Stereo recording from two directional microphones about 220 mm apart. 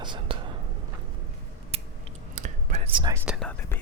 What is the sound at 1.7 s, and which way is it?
Scissors, 25° right (ahead or behind).